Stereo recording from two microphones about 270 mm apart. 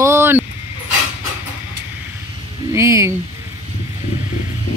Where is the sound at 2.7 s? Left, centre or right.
Centre.